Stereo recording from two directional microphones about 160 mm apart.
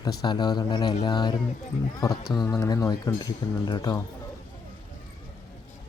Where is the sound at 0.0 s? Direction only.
25° left (ahead or behind).